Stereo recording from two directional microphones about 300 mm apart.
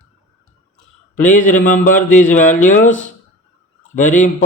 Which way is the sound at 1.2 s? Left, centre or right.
Left.